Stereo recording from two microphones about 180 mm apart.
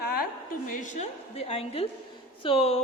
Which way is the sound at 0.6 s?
45° left (ahead or behind).